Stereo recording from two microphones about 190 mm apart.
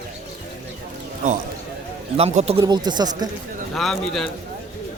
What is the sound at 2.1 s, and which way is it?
Speech, 30° right (ahead or behind).